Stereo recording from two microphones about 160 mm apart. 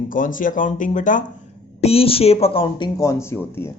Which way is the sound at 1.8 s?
35° left (ahead or behind).